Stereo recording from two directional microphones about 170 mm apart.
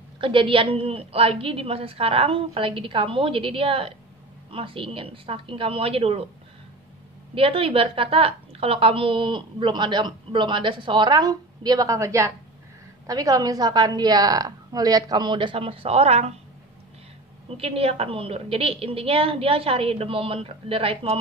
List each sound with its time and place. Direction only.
0.2 s a woman's voice: 30° right (ahead or behind)
7.3 s a woman's voice: 35° right (ahead or behind)
17.6 s a woman's voice: 35° right (ahead or behind)